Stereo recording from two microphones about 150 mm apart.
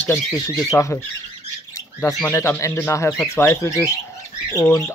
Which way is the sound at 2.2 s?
20° left (ahead or behind).